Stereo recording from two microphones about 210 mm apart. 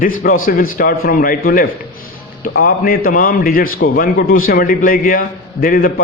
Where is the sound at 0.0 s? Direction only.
40° left (ahead or behind).